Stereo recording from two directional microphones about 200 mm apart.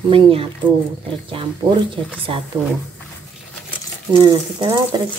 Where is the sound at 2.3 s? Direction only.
25° right (ahead or behind).